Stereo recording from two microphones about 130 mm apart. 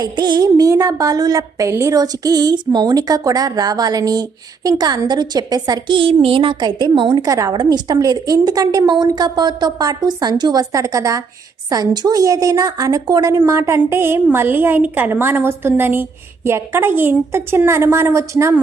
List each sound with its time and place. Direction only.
0.0 s a woman's voice: 35° right (ahead or behind)